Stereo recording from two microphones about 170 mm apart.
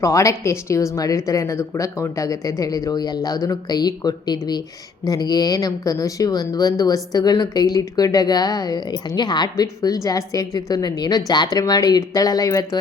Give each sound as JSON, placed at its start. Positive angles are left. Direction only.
{"t": 0.0, "sound": "speech", "side_deg": 15}